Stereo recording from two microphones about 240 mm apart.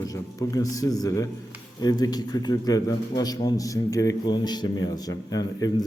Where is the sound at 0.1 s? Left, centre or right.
Centre.